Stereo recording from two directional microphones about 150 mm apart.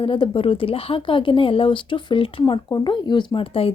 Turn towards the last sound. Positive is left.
turn(degrees=40)  # may be behind; listen again after turning